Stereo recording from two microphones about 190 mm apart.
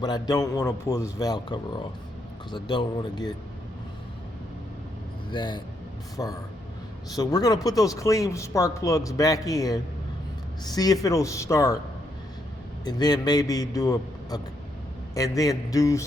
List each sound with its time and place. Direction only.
0.0 s a man's voice: 20° left (ahead or behind)
5.3 s a man's voice: 25° left (ahead or behind)
12.8 s a man's voice: 20° left (ahead or behind)